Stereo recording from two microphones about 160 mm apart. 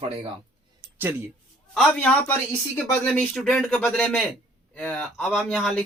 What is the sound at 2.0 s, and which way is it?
Speech, 10° left (ahead or behind).